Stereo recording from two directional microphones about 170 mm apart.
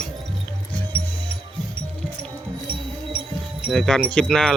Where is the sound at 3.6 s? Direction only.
Centre (ahead or behind).